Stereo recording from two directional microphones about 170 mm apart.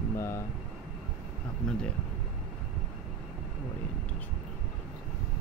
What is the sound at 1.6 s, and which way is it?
Speech, 5° left (ahead or behind).